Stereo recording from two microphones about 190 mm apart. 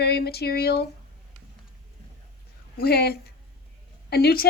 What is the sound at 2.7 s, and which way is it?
A woman's voice, 55° left (ahead or behind).